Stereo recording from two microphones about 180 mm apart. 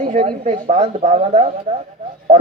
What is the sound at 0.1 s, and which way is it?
A woman's voice, 45° right (ahead or behind).